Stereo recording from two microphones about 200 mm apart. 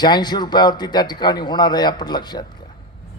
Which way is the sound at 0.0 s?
20° left (ahead or behind).